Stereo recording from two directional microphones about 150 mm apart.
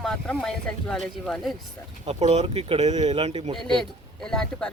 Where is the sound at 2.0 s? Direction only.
45° right (ahead or behind).